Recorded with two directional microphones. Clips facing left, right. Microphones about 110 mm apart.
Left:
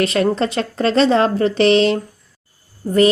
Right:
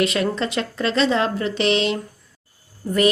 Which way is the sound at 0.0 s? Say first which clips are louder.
Left 4 dB; 40° left (ahead or behind).